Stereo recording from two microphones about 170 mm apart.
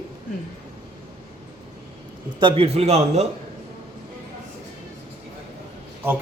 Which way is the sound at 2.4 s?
30° right (ahead or behind).